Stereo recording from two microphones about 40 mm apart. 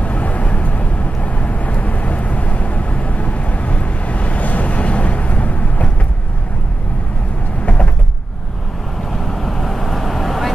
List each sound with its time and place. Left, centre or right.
0.0 s vehicle: left
7.6 s a sound: left
9.1 s vehicle: centre